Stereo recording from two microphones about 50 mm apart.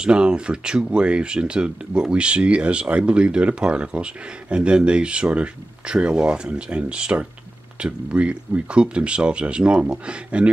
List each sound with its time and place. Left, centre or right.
0.0 s speech: centre